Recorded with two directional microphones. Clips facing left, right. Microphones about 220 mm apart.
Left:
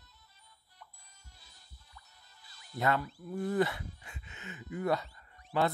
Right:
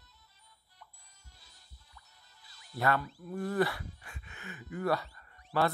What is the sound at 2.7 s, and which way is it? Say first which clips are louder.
Speech: even; 20° left (ahead or behind).